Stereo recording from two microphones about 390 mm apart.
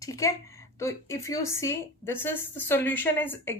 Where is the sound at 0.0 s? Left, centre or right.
Centre.